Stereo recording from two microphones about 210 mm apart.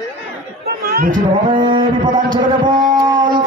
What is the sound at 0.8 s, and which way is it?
Chatter, 45° right (ahead or behind).